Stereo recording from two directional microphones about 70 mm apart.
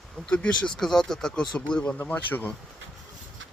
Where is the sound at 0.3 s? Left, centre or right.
Centre.